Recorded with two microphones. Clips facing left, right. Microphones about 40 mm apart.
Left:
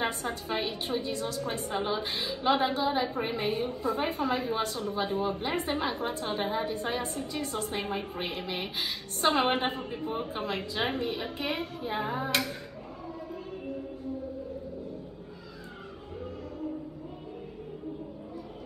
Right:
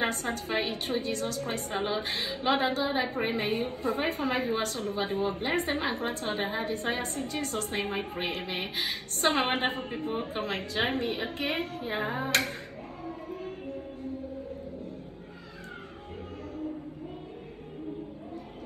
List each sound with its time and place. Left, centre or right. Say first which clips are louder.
0.0 s a woman's voice: right 1 dB; right